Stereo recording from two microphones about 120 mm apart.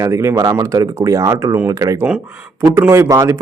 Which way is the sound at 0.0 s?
25° right (ahead or behind).